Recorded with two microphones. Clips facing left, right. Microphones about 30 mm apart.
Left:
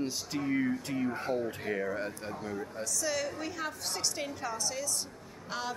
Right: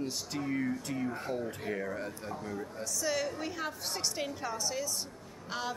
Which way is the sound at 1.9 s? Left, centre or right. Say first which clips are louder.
Left 2 dB; left.